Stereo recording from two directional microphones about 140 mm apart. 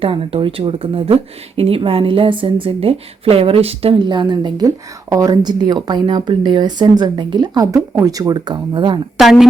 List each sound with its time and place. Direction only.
0.0 s speech: 40° right (ahead or behind)
9.1 s speech: centre (ahead or behind)